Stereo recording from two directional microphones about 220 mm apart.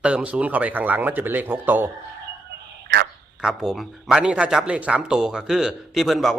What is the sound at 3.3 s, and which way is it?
A man's voice, centre (ahead or behind).